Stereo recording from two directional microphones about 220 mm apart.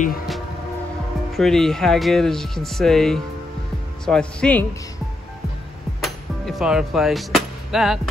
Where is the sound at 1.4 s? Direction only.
Centre (ahead or behind).